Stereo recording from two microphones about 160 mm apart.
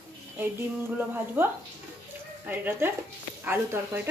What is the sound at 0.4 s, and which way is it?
A woman's voice, 10° right (ahead or behind).